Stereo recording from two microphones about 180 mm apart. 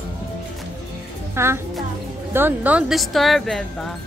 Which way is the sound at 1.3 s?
15° right (ahead or behind).